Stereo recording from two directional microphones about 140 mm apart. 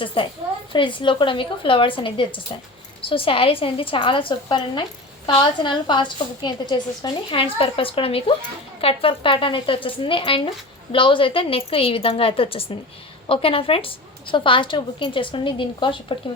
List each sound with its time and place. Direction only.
0.0 s a woman's voice: 40° left (ahead or behind)